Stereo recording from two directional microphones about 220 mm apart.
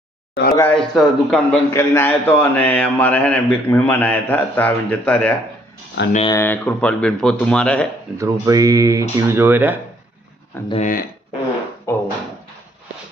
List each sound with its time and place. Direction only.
0.5 s a man's voice: 5° left (ahead or behind)
6.0 s speech: 55° left (ahead or behind)
6.3 s speech: 10° left (ahead or behind)
8.2 s speech: 15° right (ahead or behind)
10.7 s speech: 35° left (ahead or behind)
11.9 s a sound: 10° left (ahead or behind)